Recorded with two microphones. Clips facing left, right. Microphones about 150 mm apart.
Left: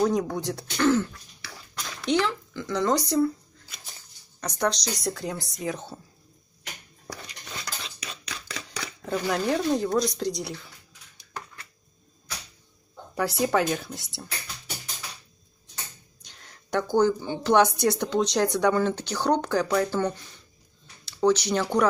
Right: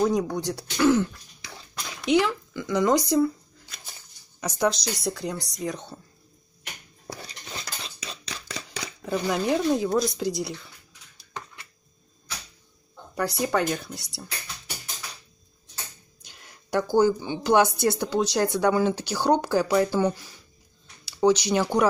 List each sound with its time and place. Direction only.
0.0 s speech: centre (ahead or behind)
0.8 s speech: 15° right (ahead or behind)
4.4 s speech: 5° right (ahead or behind)
7.1 s a sound: 30° right (ahead or behind)
9.0 s speech: 5° right (ahead or behind)
13.1 s speech: centre (ahead or behind)
16.2 s speech: 10° right (ahead or behind)